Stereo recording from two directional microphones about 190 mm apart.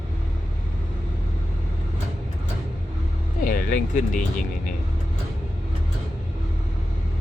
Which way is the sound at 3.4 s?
45° left (ahead or behind).